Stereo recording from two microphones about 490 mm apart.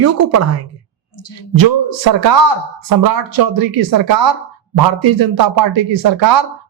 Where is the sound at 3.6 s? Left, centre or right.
Right.